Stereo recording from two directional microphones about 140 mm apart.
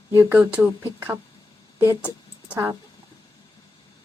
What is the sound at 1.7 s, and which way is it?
Speech, 15° right (ahead or behind).